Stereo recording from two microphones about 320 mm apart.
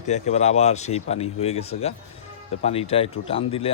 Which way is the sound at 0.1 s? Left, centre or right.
Left.